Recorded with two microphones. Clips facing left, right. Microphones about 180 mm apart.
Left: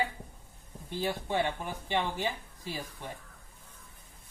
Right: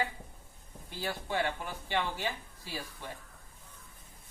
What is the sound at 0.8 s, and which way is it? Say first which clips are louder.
Speech: left 4 dB; 20° left (ahead or behind).